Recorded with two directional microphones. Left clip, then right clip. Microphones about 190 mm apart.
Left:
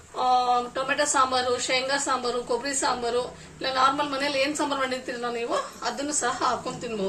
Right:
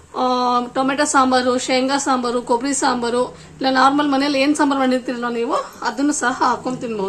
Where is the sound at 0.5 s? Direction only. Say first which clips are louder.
Right 6 dB; 50° right (ahead or behind).